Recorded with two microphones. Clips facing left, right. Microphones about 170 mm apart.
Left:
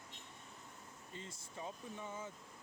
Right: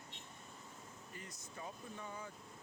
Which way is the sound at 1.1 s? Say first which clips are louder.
Left 3 dB; 25° left (ahead or behind).